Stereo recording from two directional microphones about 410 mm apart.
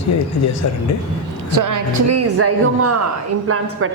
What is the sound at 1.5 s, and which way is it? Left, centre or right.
A woman's voice, right.